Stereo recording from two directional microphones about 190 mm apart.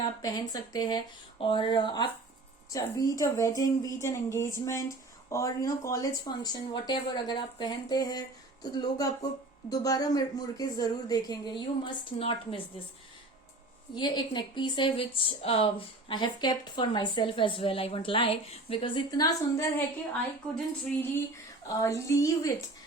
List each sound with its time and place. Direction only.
0.2 s a woman's voice: 20° left (ahead or behind)
13.9 s speech: 25° left (ahead or behind)
21.7 s a woman's voice: 15° left (ahead or behind)